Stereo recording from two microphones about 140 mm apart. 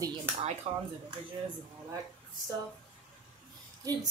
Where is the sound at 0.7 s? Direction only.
40° right (ahead or behind).